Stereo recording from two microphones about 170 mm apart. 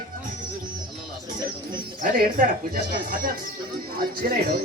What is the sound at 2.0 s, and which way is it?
Speech, 60° right (ahead or behind).